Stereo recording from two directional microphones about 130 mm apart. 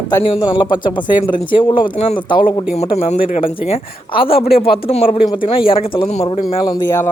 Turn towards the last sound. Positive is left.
turn(degrees=30)  # may be behind; listen again after turning